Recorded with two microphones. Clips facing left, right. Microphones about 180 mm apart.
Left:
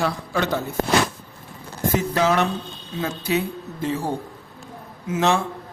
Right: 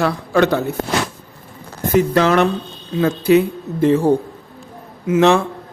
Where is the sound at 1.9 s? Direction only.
70° right (ahead or behind).